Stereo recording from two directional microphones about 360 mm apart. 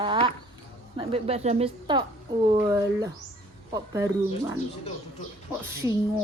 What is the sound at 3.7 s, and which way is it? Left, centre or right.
Speech, centre.